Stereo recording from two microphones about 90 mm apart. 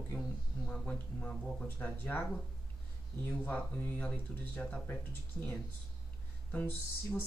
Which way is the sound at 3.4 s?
15° left (ahead or behind).